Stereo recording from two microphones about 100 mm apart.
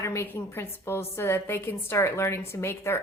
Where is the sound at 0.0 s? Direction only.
25° left (ahead or behind).